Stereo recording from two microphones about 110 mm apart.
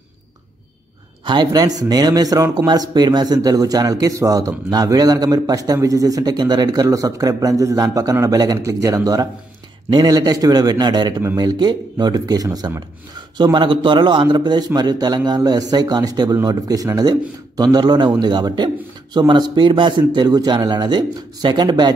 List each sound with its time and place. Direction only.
1.2 s speech: 40° right (ahead or behind)
13.4 s speech: 45° right (ahead or behind)